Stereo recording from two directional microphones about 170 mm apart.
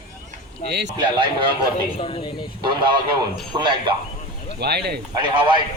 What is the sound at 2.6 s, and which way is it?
A man's voice, 25° right (ahead or behind).